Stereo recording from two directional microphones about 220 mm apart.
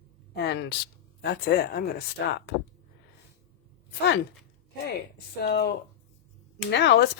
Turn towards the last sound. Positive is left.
turn(degrees=50)  # may be behind; listen again after turning